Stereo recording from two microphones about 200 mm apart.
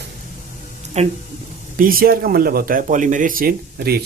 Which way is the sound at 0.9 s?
35° right (ahead or behind).